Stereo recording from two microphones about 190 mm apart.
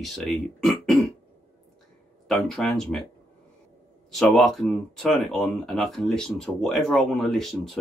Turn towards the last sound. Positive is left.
turn(degrees=0)  # may be behind; listen again after turning